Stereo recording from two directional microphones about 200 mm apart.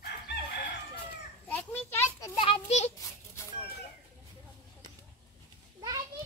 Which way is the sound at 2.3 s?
25° left (ahead or behind).